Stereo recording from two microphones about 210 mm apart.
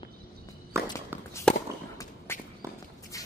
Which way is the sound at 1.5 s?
5° left (ahead or behind).